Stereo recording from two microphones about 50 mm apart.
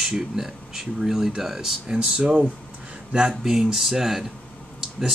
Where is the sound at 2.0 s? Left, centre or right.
Centre.